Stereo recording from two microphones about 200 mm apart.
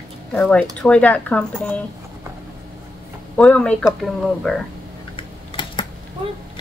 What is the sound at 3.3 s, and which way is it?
Speech, 5° left (ahead or behind).